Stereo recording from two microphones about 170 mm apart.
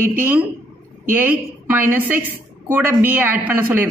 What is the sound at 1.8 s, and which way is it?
Speech, 10° right (ahead or behind).